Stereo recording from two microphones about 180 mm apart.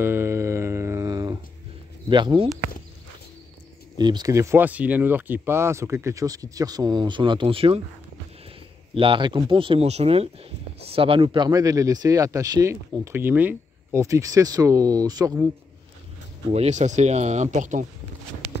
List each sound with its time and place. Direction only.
0.0 s a sound: 15° right (ahead or behind)
2.0 s speech: 25° right (ahead or behind)
4.0 s speech: 25° right (ahead or behind)
8.9 s speech: 30° right (ahead or behind)
16.5 s speech: 40° right (ahead or behind)